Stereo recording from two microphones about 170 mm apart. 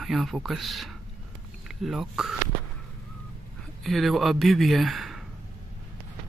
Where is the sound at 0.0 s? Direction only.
Centre (ahead or behind).